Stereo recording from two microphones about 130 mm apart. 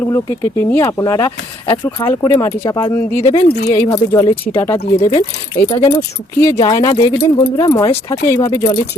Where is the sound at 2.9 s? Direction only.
15° left (ahead or behind).